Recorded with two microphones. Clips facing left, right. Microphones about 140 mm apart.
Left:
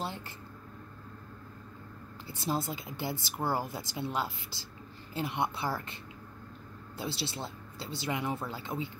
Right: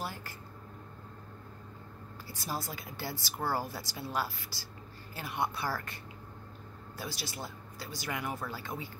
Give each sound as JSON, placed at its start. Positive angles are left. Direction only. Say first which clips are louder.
{"t": 2.2, "sound": "speech", "louder": "left 5 dB", "side_deg": 25}
{"t": 7.0, "sound": "speech", "louder": "left 4 dB", "side_deg": 25}